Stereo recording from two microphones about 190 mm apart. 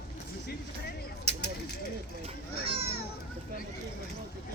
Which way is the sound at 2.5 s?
60° left (ahead or behind).